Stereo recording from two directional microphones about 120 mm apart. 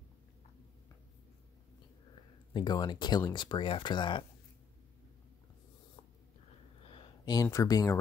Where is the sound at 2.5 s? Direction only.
35° left (ahead or behind).